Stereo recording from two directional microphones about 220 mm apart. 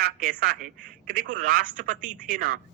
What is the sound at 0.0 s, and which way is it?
A man's voice, 40° right (ahead or behind).